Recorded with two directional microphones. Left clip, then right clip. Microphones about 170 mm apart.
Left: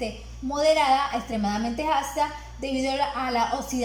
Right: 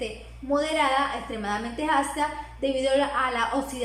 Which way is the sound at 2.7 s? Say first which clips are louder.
Right 2 dB; 25° left (ahead or behind).